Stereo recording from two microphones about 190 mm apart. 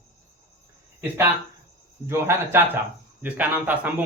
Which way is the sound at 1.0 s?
10° right (ahead or behind).